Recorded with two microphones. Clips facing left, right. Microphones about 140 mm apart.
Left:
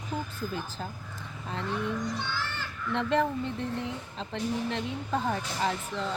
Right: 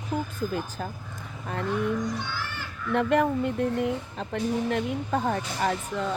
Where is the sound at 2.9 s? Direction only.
55° right (ahead or behind).